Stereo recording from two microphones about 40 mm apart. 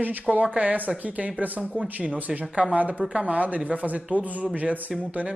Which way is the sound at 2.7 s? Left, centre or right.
Right.